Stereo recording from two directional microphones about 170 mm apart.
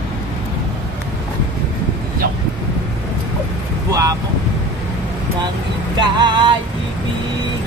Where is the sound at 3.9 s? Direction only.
20° right (ahead or behind).